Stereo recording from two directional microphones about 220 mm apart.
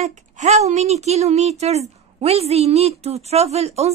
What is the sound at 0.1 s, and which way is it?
A woman's voice, 30° right (ahead or behind).